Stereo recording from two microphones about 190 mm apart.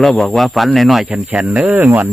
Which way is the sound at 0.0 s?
Centre (ahead or behind).